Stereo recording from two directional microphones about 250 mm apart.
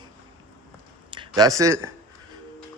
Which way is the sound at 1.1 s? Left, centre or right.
Centre.